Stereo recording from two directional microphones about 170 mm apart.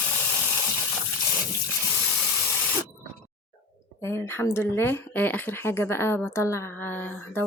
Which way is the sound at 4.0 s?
15° left (ahead or behind).